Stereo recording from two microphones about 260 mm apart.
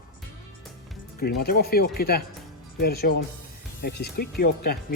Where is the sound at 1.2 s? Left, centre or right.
Left.